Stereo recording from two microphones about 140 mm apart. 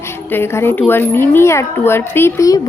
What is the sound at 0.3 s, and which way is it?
Speech, 15° left (ahead or behind).